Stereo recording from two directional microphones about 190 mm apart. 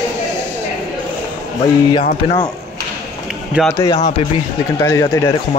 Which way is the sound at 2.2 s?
30° left (ahead or behind).